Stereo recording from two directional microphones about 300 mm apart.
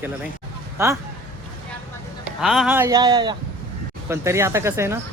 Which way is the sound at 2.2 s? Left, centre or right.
Centre.